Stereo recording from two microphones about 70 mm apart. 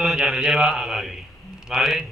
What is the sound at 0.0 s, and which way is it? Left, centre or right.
A man's voice, centre.